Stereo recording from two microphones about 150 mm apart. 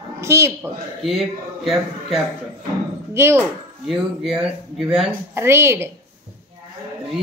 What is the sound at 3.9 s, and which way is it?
Speech, centre (ahead or behind).